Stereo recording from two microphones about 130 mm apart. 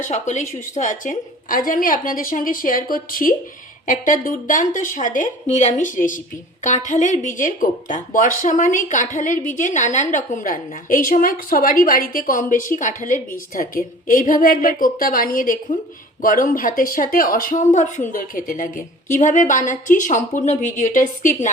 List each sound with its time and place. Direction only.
0.0 s speech: 70° left (ahead or behind); by 18.8 s 90° left
19.2 s a woman's voice: 75° left (ahead or behind)